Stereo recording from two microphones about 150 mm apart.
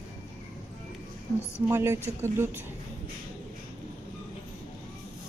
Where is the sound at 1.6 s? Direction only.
15° right (ahead or behind).